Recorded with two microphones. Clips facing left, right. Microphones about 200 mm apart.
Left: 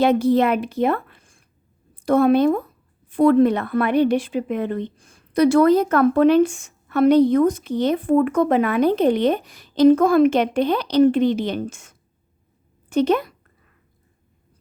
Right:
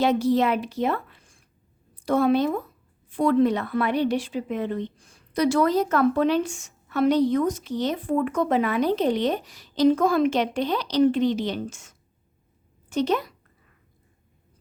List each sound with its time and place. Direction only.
0.0 s a woman's voice: 55° left (ahead or behind)